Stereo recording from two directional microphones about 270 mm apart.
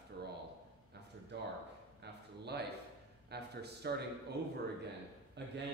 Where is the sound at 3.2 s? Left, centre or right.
Right.